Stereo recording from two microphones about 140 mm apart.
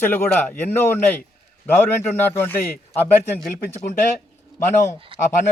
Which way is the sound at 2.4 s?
15° left (ahead or behind).